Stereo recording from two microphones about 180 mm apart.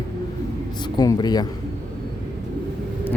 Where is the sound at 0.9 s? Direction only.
25° left (ahead or behind).